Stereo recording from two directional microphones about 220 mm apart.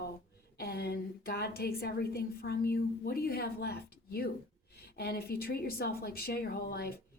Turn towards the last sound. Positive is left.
turn(degrees=45)  # may be behind; listen again after turning